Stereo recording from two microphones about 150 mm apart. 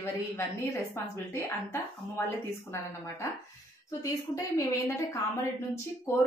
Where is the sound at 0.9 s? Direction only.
15° left (ahead or behind).